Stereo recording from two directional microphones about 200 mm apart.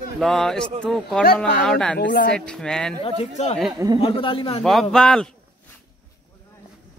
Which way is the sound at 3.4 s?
35° left (ahead or behind).